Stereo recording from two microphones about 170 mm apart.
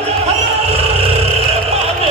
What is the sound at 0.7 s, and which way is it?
Vehicle, 35° right (ahead or behind).